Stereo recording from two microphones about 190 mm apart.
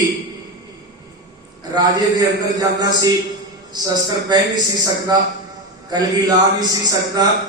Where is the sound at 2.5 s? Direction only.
20° right (ahead or behind).